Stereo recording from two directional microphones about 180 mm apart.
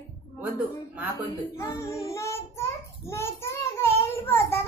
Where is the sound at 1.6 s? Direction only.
15° left (ahead or behind).